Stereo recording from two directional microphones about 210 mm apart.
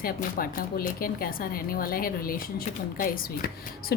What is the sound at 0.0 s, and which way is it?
Speech, 45° left (ahead or behind).